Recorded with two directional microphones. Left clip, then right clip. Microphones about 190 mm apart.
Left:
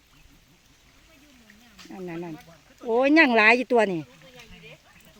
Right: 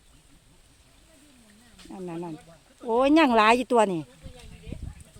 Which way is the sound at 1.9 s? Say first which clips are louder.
Even; 5° right (ahead or behind).